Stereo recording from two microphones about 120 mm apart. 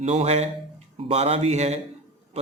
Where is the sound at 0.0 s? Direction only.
65° right (ahead or behind).